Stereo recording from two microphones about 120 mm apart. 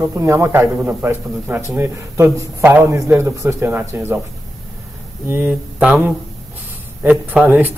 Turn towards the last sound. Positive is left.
turn(degrees=-15)  # may be behind; listen again after turning